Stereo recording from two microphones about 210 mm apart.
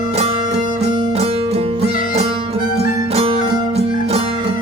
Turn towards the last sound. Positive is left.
turn(degrees=-25)  # may be behind; listen again after turning